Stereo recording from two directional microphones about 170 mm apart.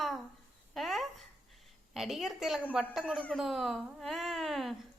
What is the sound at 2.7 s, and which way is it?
A woman's voice, centre (ahead or behind).